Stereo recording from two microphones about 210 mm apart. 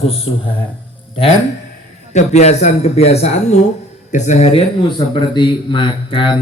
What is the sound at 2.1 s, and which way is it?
A man's voice, 35° left (ahead or behind).